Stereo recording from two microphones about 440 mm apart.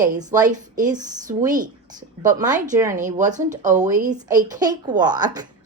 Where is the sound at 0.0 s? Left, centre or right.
Centre.